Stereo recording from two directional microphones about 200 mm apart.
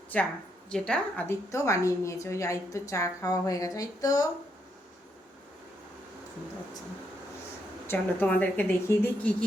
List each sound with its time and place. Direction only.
0.7 s a woman's voice: 5° left (ahead or behind)
7.9 s a woman's voice: 10° left (ahead or behind)